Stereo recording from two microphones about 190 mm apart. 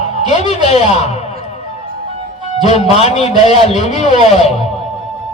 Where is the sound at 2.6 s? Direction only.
35° left (ahead or behind).